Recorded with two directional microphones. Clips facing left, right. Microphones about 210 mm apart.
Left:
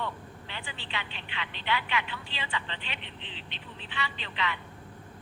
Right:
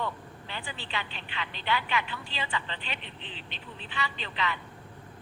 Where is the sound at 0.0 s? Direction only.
40° right (ahead or behind).